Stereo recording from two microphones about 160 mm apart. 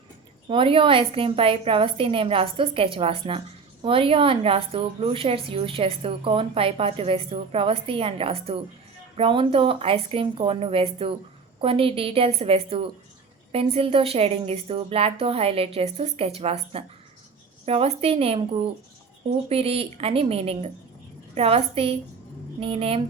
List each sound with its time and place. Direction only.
0.4 s a woman's voice: 30° right (ahead or behind)
19.5 s a woman's voice: 35° right (ahead or behind)